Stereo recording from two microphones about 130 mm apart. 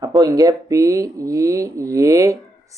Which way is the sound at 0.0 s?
30° right (ahead or behind).